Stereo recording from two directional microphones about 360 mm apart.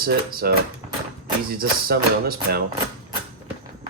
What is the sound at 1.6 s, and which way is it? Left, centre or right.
Speech, right.